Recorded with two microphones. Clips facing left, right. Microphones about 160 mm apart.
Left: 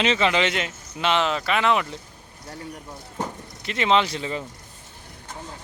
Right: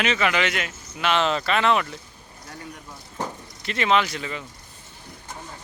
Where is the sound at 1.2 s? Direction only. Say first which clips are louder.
Right 1 dB; 10° left (ahead or behind).